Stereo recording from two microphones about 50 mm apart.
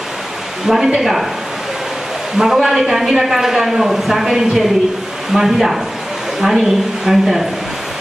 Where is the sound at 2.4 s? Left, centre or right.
Centre.